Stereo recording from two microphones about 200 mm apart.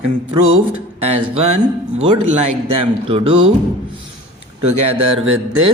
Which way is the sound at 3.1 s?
25° right (ahead or behind).